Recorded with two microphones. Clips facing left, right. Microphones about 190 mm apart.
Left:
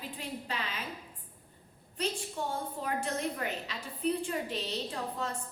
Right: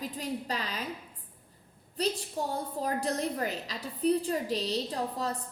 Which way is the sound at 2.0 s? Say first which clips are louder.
Right 3 dB; 35° right (ahead or behind).